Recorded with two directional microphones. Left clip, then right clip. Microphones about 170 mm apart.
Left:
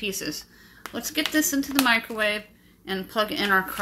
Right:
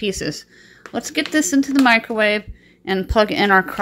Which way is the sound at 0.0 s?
50° right (ahead or behind).